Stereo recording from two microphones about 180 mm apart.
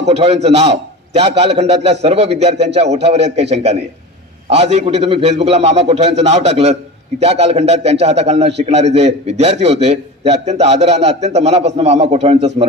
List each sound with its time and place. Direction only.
0.0 s a man's voice: 35° right (ahead or behind)